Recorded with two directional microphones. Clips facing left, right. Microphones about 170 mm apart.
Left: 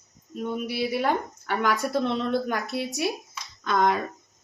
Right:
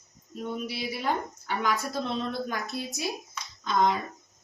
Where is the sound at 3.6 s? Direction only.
55° left (ahead or behind).